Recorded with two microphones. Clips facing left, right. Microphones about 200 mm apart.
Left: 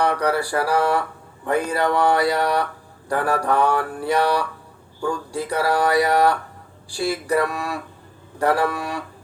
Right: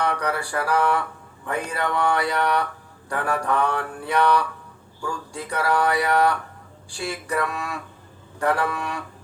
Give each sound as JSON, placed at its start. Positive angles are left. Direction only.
{"t": 0.0, "sound": "mantra", "side_deg": 35}
{"t": 8.4, "sound": "a man's voice", "side_deg": 35}